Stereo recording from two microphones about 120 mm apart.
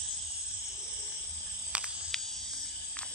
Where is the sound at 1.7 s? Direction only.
10° right (ahead or behind).